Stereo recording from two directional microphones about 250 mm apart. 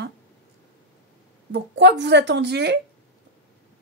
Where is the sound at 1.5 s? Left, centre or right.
Right.